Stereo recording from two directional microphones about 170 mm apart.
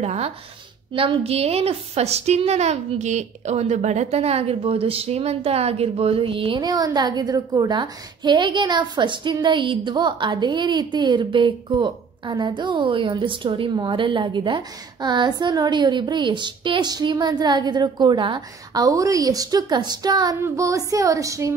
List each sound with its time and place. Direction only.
0.0 s a woman's voice: 40° right (ahead or behind); by 21.5 s 20° right (ahead or behind)